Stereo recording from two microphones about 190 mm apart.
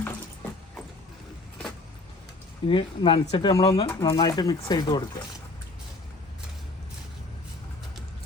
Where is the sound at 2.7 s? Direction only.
25° left (ahead or behind).